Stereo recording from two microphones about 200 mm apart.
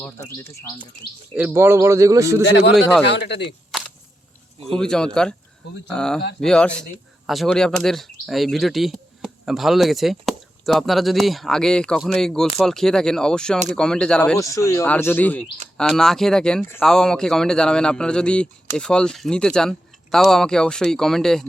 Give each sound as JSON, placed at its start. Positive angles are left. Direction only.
{"t": 1.3, "sound": "speech", "side_deg": -5}
{"t": 3.1, "sound": "a man's voice", "side_deg": 60}
{"t": 3.7, "sound": "a sound", "side_deg": 0}
{"t": 4.8, "sound": "speech", "side_deg": 5}
{"t": 14.3, "sound": "speech", "side_deg": 15}